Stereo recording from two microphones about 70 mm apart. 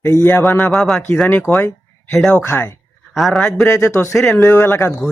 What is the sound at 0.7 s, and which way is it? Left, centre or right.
Speech, centre.